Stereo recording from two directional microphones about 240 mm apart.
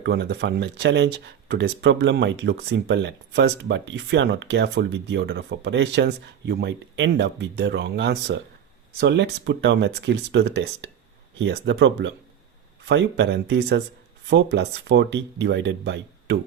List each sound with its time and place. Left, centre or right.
0.0 s speech: right